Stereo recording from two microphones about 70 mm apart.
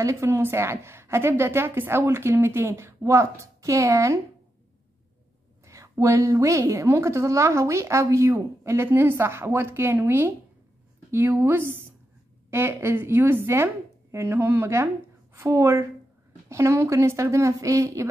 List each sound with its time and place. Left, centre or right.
0.0 s a woman's voice: right
5.7 s a woman's voice: right